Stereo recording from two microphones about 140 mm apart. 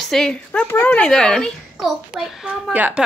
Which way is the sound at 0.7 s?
15° left (ahead or behind).